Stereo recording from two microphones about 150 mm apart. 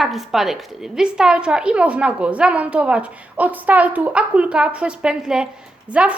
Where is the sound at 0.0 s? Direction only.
Centre (ahead or behind).